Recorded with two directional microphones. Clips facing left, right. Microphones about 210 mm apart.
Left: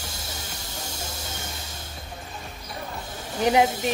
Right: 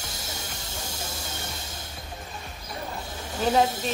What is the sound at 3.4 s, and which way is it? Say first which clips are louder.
Speech: left 2 dB; 15° left (ahead or behind).